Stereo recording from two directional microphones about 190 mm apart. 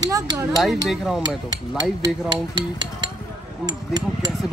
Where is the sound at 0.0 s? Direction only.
20° right (ahead or behind).